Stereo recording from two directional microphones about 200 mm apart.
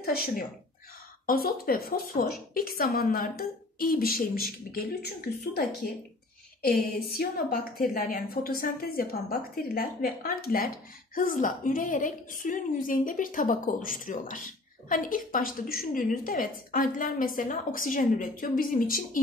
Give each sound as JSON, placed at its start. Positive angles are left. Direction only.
{"t": 0.0, "sound": "a woman's voice", "side_deg": 50}
{"t": 6.6, "sound": "a woman's voice", "side_deg": 50}